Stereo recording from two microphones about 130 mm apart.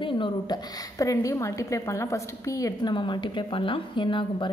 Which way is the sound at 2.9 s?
35° left (ahead or behind).